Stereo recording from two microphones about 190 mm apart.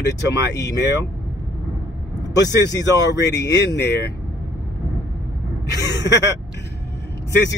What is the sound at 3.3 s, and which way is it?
Speech, 65° left (ahead or behind).